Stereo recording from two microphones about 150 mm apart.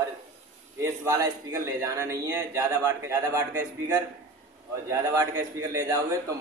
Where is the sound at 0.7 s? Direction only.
20° right (ahead or behind).